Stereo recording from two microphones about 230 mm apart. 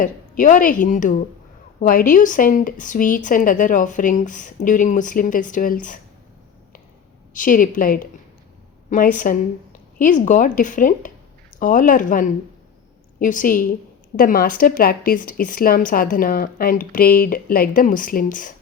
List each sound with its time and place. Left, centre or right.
0.0 s a woman's voice: left
7.3 s a woman's voice: left